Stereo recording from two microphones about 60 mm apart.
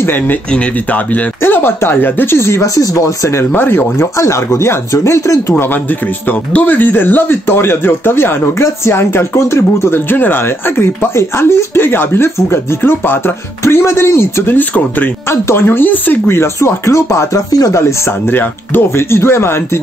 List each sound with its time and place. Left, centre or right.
1.4 s speech: left
3.3 s speech: left
4.2 s speech: left
6.5 s speech: left
18.3 s speech: left